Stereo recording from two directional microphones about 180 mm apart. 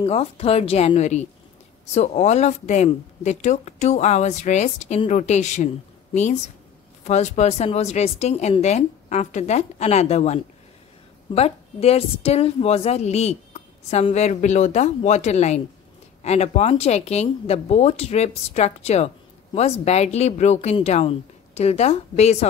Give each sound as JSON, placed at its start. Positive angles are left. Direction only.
{"t": 0.0, "sound": "speech", "side_deg": 35}
{"t": 7.1, "sound": "speech", "side_deg": 40}